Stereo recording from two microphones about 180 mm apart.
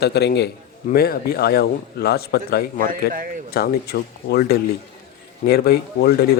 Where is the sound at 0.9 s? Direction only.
55° left (ahead or behind).